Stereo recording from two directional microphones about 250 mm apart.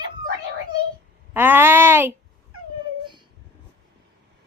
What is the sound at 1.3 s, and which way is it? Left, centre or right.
Speech, centre.